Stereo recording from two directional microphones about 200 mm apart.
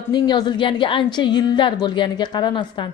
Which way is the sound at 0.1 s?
20° left (ahead or behind).